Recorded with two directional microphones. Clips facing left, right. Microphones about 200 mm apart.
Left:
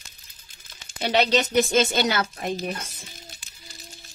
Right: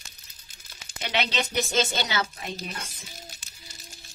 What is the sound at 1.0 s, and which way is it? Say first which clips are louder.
Speech: left 8 dB; 40° left (ahead or behind).